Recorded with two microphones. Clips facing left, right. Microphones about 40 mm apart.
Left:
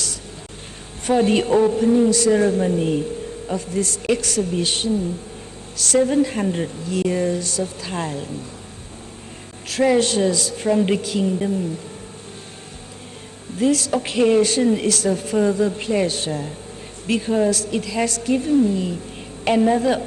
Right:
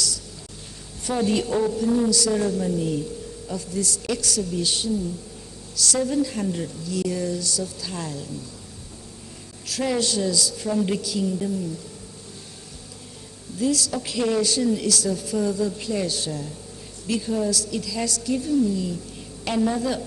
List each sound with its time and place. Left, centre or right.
1.0 s a woman's voice: left
9.6 s a woman's voice: left
13.6 s a woman's voice: left